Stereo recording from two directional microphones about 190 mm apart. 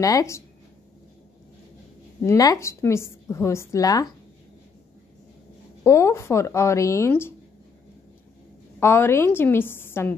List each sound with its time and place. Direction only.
0.0 s a woman's voice: 15° left (ahead or behind)
2.2 s a woman's voice: 20° left (ahead or behind)
5.9 s a woman's voice: 15° left (ahead or behind)
8.7 s a woman's voice: 15° left (ahead or behind)